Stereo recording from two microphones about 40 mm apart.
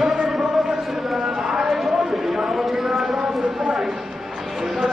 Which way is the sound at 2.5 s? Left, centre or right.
Centre.